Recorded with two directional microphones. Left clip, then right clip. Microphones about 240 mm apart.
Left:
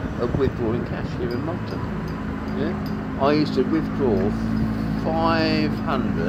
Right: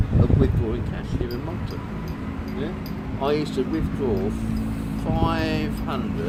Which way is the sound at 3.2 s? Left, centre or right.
Centre.